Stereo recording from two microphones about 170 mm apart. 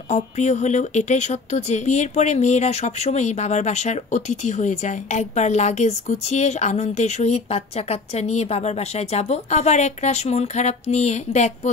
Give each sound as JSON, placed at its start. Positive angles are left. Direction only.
{"t": 0.1, "sound": "speech", "side_deg": 45}